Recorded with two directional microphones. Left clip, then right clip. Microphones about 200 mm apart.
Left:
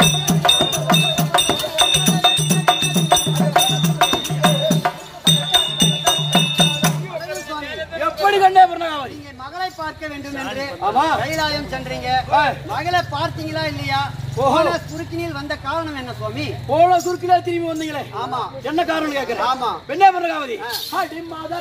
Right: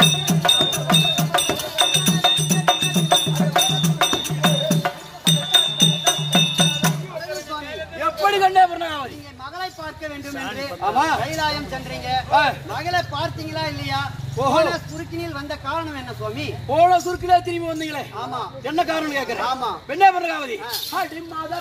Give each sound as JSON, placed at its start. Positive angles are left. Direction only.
{"t": 0.0, "sound": "music", "side_deg": 5}
{"t": 8.0, "sound": "a sound", "side_deg": -5}
{"t": 10.8, "sound": "a sound", "side_deg": -15}
{"t": 11.2, "sound": "a sound", "side_deg": 10}
{"t": 12.3, "sound": "speech", "side_deg": -10}
{"t": 12.7, "sound": "a man's voice", "side_deg": 15}
{"t": 14.4, "sound": "a man's voice", "side_deg": -10}
{"t": 14.7, "sound": "a man's voice", "side_deg": 10}
{"t": 16.7, "sound": "a man's voice", "side_deg": -10}
{"t": 18.2, "sound": "a man's voice", "side_deg": 20}
{"t": 18.7, "sound": "a man's voice", "side_deg": -10}
{"t": 19.4, "sound": "a man's voice", "side_deg": 20}
{"t": 19.9, "sound": "a man's voice", "side_deg": -10}